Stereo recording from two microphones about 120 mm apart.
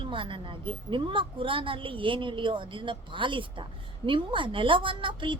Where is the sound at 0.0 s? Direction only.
45° right (ahead or behind).